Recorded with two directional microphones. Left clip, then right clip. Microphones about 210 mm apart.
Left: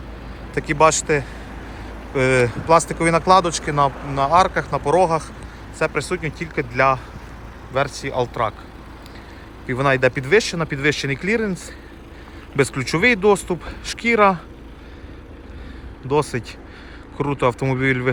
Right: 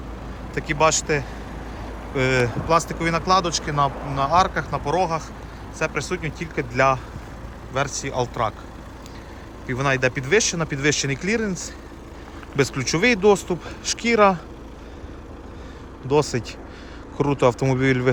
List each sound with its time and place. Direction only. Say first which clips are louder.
0.5 s speech: left 4 dB; 5° right (ahead or behind)
9.6 s speech: left 4 dB; 10° right (ahead or behind)
12.5 s speech: left 2 dB; 15° right (ahead or behind)
16.0 s speech: even; 20° right (ahead or behind)